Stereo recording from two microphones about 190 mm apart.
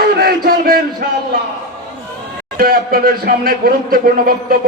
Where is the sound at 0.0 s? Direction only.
55° right (ahead or behind).